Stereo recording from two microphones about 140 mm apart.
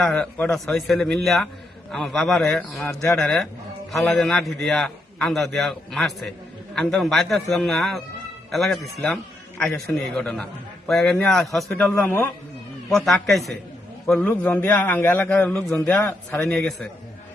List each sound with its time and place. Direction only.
0.0 s a man's voice: 10° left (ahead or behind)
12.9 s a man's voice: centre (ahead or behind)
14.1 s a man's voice: 10° left (ahead or behind)